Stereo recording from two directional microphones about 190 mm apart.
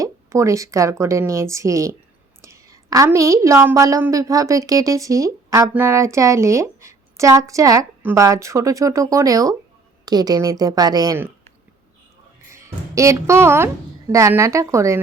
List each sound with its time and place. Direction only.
0.0 s a woman's voice: 15° right (ahead or behind)
12.5 s a woman's voice: 15° right (ahead or behind)